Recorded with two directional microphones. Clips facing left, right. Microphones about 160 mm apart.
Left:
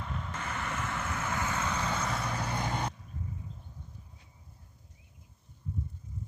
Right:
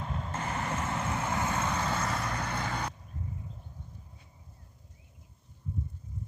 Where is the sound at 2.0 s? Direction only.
Centre (ahead or behind); by 2.9 s 20° left (ahead or behind).